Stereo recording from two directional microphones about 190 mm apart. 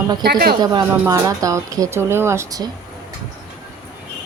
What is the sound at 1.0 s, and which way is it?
Speech, 20° right (ahead or behind).